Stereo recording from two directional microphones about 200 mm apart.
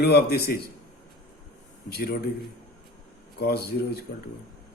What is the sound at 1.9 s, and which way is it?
Speech, 50° left (ahead or behind).